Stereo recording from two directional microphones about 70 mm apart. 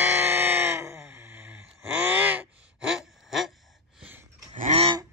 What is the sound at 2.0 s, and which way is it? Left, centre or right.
Gasp, right.